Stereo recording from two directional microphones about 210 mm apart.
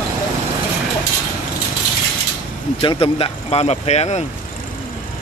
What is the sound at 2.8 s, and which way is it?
Speech, 25° left (ahead or behind).